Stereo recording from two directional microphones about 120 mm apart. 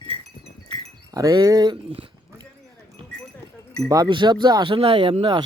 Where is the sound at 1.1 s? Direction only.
30° right (ahead or behind).